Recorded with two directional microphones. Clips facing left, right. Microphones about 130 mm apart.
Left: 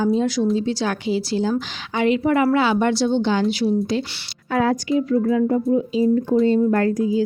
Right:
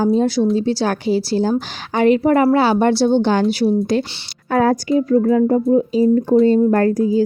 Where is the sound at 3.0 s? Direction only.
50° right (ahead or behind); by 7.2 s 35° right (ahead or behind).